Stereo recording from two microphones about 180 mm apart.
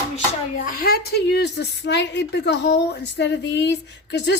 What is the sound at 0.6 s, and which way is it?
A woman's voice, 60° left (ahead or behind).